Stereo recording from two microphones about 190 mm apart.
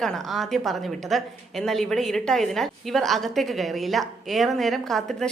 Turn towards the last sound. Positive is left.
turn(degrees=0)  # may be behind; listen again after turning